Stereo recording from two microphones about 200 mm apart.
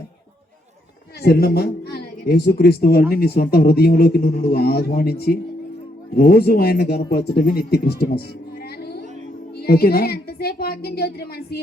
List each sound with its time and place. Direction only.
1.2 s a man's voice: 50° left (ahead or behind)
6.1 s a man's voice: 50° left (ahead or behind)
9.6 s a man's voice: 50° left (ahead or behind)